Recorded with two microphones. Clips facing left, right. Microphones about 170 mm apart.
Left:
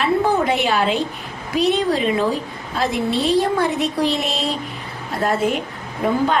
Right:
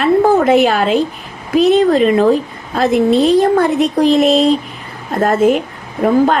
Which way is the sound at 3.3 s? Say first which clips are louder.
Right 7 dB; 45° right (ahead or behind).